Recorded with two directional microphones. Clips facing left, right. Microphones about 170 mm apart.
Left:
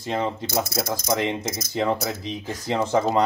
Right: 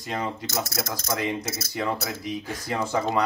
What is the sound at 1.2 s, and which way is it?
Speech, 25° left (ahead or behind).